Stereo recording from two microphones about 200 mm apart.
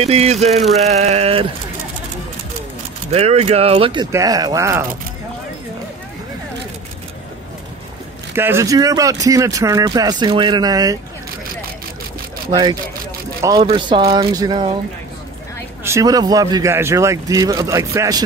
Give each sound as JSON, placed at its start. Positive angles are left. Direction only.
{"t": 0.0, "sound": "a sound", "side_deg": -30}
{"t": 3.1, "sound": "speech", "side_deg": -30}
{"t": 8.4, "sound": "speech", "side_deg": -10}
{"t": 12.4, "sound": "speech", "side_deg": -20}
{"t": 15.8, "sound": "speech", "side_deg": -15}